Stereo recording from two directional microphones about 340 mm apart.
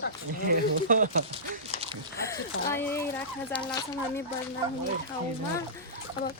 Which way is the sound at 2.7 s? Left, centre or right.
Centre.